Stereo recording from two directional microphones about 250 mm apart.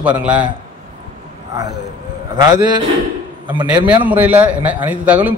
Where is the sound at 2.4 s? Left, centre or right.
Centre.